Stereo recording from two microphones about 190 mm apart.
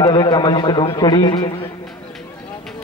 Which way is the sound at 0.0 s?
25° left (ahead or behind).